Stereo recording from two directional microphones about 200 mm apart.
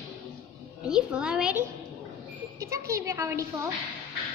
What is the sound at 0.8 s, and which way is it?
Speech, 5° right (ahead or behind).